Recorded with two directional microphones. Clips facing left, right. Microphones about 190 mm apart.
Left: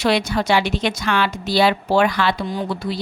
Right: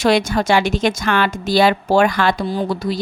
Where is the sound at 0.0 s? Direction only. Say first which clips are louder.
Right 3 dB; 45° right (ahead or behind).